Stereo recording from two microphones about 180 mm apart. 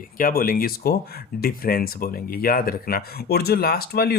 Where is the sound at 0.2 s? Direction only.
50° left (ahead or behind).